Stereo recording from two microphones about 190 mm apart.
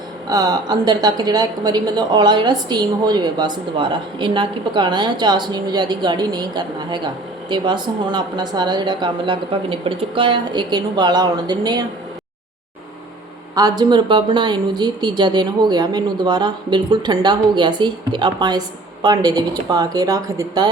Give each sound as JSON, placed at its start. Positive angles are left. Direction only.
{"t": 0.3, "sound": "a woman's voice", "side_deg": -20}
{"t": 13.6, "sound": "a woman's voice", "side_deg": -20}